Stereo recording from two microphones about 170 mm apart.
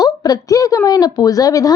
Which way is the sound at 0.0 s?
20° left (ahead or behind).